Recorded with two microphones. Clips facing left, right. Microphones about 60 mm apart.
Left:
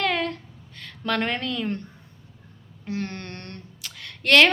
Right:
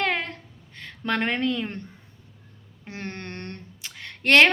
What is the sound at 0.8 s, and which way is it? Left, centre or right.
Speech, right.